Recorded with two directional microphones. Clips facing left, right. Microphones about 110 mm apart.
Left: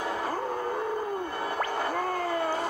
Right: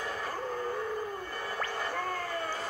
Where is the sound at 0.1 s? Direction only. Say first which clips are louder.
Left 6 dB; 70° left (ahead or behind).